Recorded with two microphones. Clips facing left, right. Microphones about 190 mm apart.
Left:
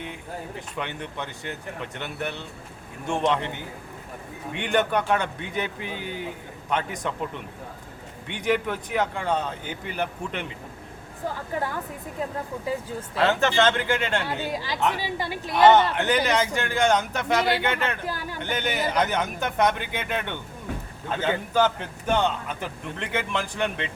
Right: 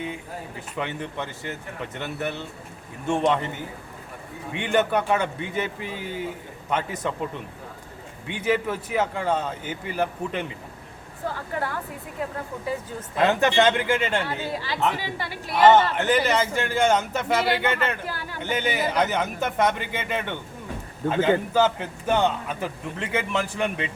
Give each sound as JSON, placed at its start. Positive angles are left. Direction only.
{"t": 0.8, "sound": "a man's voice", "side_deg": 0}
{"t": 8.3, "sound": "a man's voice", "side_deg": -5}
{"t": 13.1, "sound": "a man's voice", "side_deg": -15}
{"t": 14.3, "sound": "speech", "side_deg": 15}
{"t": 15.5, "sound": "a man's voice", "side_deg": -5}